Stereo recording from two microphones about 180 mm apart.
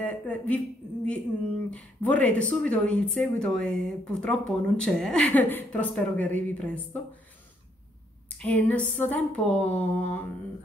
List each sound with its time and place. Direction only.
0.0 s speech: 5° left (ahead or behind)
1.7 s speech: 5° left (ahead or behind)
8.4 s speech: 10° left (ahead or behind)